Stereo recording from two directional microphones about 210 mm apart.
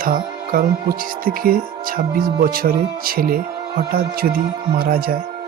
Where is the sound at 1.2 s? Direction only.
45° right (ahead or behind).